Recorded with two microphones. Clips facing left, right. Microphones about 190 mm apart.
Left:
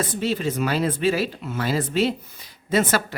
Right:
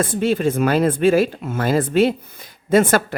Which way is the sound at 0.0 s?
55° right (ahead or behind).